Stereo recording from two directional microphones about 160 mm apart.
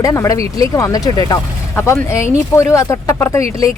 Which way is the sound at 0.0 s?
20° left (ahead or behind).